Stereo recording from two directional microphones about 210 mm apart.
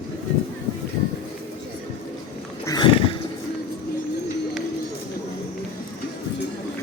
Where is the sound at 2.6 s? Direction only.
20° left (ahead or behind).